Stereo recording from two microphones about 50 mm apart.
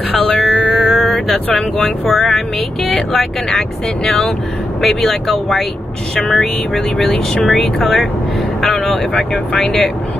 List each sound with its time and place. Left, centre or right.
0.4 s speech: centre
8.7 s speech: left